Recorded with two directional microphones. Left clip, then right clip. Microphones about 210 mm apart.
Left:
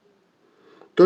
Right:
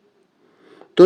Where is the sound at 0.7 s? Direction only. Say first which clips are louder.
Right 4 dB; 35° right (ahead or behind).